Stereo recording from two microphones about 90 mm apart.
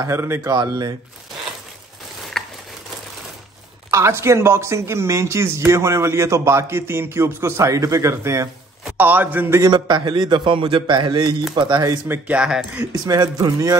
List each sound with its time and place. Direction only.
0.0 s a man's voice: 30° right (ahead or behind)
0.4 s speech: 45° right (ahead or behind)
2.3 s a sound: 5° left (ahead or behind)
3.9 s speech: 30° right (ahead or behind)
8.9 s a man's voice: 20° right (ahead or behind)
9.7 s a man's voice: 55° right (ahead or behind)
12.1 s speech: 15° right (ahead or behind)
13.0 s speech: 45° right (ahead or behind)